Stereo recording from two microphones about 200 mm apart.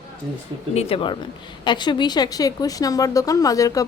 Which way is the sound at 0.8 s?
30° left (ahead or behind).